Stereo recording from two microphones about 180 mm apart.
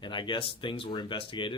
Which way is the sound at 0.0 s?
25° left (ahead or behind).